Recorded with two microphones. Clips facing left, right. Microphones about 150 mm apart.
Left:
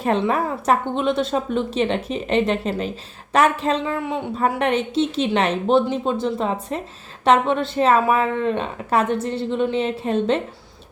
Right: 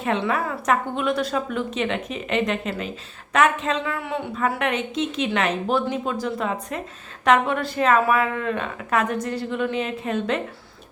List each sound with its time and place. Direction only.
0.0 s a woman's voice: 40° left (ahead or behind)
3.9 s a man's voice: 15° left (ahead or behind)
4.4 s a woman's voice: 35° left (ahead or behind)